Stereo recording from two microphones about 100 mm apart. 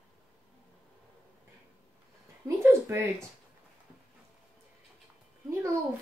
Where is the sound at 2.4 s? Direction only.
30° right (ahead or behind).